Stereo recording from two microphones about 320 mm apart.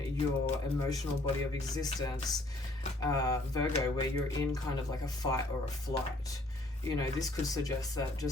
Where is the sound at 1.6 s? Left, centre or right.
Centre.